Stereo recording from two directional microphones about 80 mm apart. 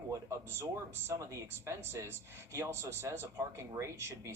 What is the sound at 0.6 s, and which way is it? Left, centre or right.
Speech, right.